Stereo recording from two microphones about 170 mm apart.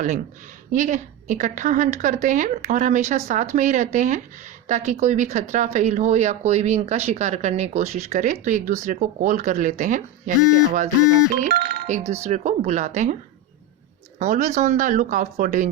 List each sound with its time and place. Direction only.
0.7 s speech: 45° right (ahead or behind)
11.3 s speech: 45° right (ahead or behind)
14.2 s speech: 45° right (ahead or behind)